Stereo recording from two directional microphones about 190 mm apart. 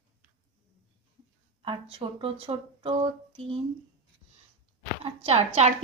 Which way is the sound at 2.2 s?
30° right (ahead or behind).